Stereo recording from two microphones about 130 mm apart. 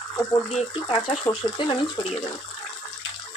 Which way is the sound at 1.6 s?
40° left (ahead or behind).